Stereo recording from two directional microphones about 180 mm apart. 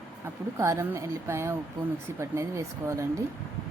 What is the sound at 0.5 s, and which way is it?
Speech, 15° right (ahead or behind).